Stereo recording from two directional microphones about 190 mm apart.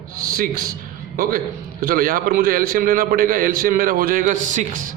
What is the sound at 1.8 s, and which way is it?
A man's voice, 50° right (ahead or behind).